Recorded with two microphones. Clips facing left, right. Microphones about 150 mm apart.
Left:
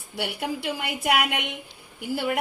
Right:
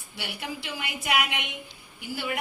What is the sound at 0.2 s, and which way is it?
A woman's voice, 55° left (ahead or behind).